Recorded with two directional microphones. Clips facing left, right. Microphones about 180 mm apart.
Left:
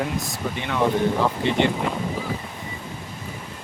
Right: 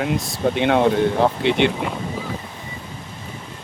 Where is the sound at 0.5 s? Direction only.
75° right (ahead or behind).